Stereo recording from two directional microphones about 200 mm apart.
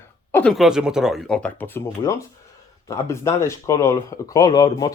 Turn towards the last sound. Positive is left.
turn(degrees=20)  # may be behind; listen again after turning